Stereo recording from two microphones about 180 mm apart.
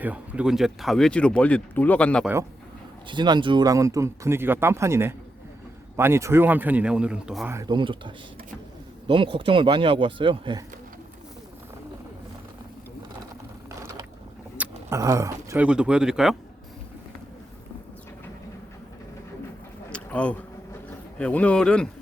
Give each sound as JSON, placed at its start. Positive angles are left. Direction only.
{"t": 0.0, "sound": "speech", "side_deg": -5}
{"t": 2.2, "sound": "speech", "side_deg": -15}
{"t": 3.1, "sound": "speech", "side_deg": -25}
{"t": 7.5, "sound": "speech", "side_deg": -25}
{"t": 14.6, "sound": "speech", "side_deg": -15}
{"t": 15.6, "sound": "speech", "side_deg": -5}
{"t": 19.9, "sound": "a sound", "side_deg": 5}
{"t": 21.2, "sound": "speech", "side_deg": 5}